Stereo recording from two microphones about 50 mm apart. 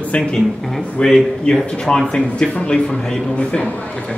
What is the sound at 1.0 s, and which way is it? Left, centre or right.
Speech, centre.